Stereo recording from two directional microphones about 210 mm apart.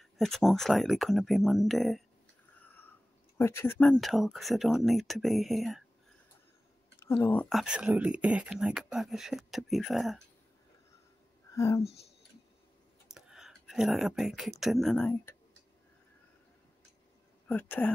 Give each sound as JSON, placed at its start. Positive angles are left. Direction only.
{"t": 0.0, "sound": "speech", "side_deg": 0}
{"t": 2.6, "sound": "a sound", "side_deg": 10}
{"t": 3.3, "sound": "speech", "side_deg": 10}
{"t": 7.0, "sound": "speech", "side_deg": 10}
{"t": 11.5, "sound": "speech", "side_deg": 15}
{"t": 11.8, "sound": "speech", "side_deg": 30}
{"t": 13.1, "sound": "speech", "side_deg": 0}
{"t": 17.5, "sound": "speech", "side_deg": 10}